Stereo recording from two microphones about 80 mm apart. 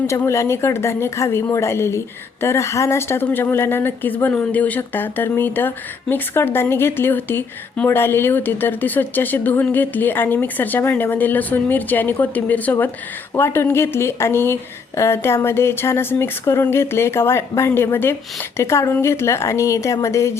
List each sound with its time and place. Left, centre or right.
0.3 s a woman's voice: left; by 12.7 s centre
13.3 s a woman's voice: left